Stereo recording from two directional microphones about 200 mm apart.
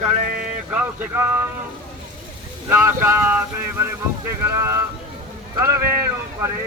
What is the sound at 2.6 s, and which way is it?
Speech, 10° right (ahead or behind).